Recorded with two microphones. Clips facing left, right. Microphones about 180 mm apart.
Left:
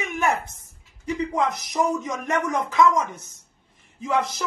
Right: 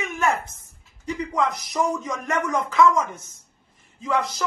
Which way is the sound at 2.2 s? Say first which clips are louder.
Right 1 dB; 20° left (ahead or behind).